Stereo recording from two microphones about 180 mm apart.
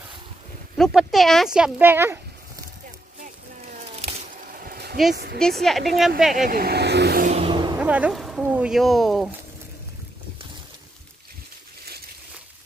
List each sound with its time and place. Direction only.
0.7 s speech: centre (ahead or behind)
4.0 s a sound: 50° right (ahead or behind)
5.1 s a woman's voice: 65° right (ahead or behind)
5.4 s speech: centre (ahead or behind)
6.3 s vehicle: 50° right (ahead or behind)
7.2 s vehicle: 40° right (ahead or behind)
7.5 s vehicle: 25° right (ahead or behind)
7.8 s speech: 5° right (ahead or behind)